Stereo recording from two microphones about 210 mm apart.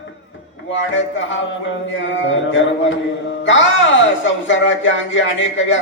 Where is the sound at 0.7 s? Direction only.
65° left (ahead or behind).